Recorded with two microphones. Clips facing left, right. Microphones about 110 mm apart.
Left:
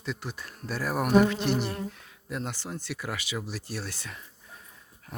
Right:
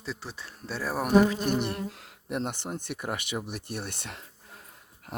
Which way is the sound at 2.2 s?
55° right (ahead or behind).